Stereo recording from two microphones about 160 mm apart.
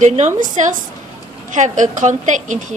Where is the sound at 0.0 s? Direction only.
45° right (ahead or behind).